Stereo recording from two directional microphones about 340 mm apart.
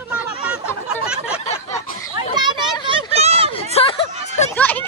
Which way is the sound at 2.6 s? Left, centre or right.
Centre.